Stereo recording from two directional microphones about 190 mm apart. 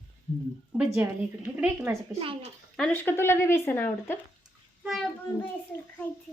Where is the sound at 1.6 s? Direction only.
10° right (ahead or behind).